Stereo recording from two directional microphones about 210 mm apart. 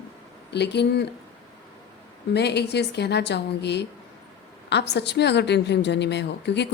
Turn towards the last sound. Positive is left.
turn(degrees=55)  # may be behind; listen again after turning